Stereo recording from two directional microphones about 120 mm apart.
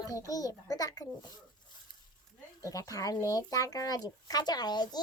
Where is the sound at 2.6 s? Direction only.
30° left (ahead or behind).